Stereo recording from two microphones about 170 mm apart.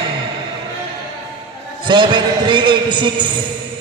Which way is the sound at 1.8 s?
30° right (ahead or behind).